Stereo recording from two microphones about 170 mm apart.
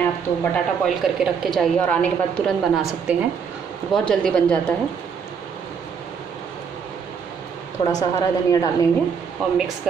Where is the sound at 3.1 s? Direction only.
10° right (ahead or behind).